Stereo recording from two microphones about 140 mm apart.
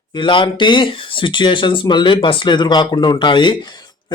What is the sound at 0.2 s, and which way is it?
Speech, 35° left (ahead or behind).